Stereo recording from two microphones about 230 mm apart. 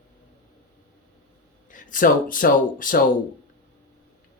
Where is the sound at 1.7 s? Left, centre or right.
Left.